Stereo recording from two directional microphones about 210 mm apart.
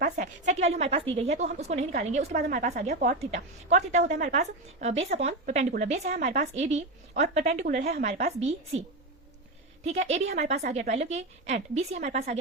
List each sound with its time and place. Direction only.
0.0 s a woman's voice: 35° right (ahead or behind)
7.9 s a woman's voice: 45° right (ahead or behind)
8.4 s a woman's voice: 30° right (ahead or behind)
9.8 s a woman's voice: 30° right (ahead or behind)